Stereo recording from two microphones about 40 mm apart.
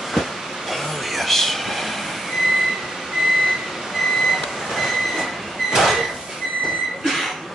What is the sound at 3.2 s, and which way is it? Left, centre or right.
Vehicle, centre.